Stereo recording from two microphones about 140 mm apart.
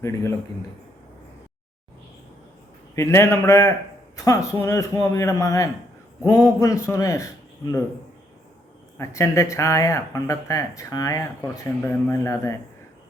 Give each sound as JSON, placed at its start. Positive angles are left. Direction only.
{"t": 0.0, "sound": "speech", "side_deg": 20}
{"t": 2.9, "sound": "speech", "side_deg": 20}
{"t": 9.0, "sound": "speech", "side_deg": 20}
{"t": 11.4, "sound": "speech", "side_deg": 15}